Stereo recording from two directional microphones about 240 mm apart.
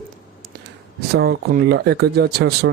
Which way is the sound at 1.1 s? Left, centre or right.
Right.